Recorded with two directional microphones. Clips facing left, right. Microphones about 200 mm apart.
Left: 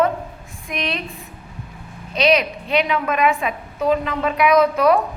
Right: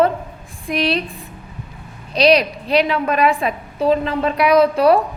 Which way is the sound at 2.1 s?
35° right (ahead or behind).